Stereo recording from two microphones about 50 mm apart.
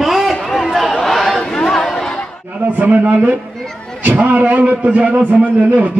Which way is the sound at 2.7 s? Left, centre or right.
Right.